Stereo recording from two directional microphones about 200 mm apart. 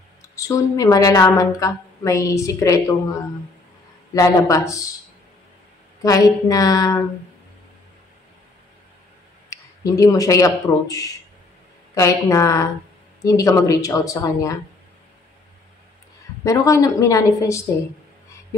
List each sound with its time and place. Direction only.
0.4 s a woman's voice: 15° left (ahead or behind)
4.1 s a woman's voice: 15° left (ahead or behind)
6.0 s a woman's voice: 15° left (ahead or behind)
9.5 s a woman's voice: 15° left (ahead or behind)
16.4 s a woman's voice: 15° left (ahead or behind)